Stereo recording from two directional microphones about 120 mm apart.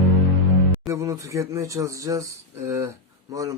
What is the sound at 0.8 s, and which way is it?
A man's voice, 25° right (ahead or behind).